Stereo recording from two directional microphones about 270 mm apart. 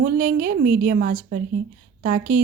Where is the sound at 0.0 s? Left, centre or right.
Right.